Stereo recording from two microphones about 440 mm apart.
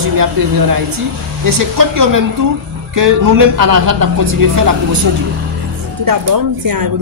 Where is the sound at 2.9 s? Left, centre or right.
Right.